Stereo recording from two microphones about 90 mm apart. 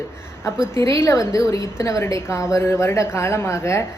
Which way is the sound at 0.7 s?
30° left (ahead or behind).